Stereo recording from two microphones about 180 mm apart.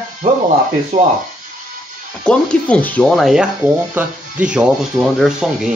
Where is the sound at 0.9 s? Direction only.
45° right (ahead or behind).